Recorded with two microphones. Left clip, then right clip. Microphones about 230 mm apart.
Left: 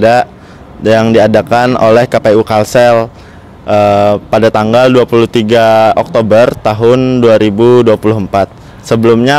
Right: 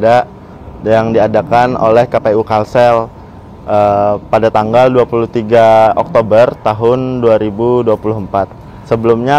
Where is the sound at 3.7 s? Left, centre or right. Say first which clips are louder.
Left 3 dB; left.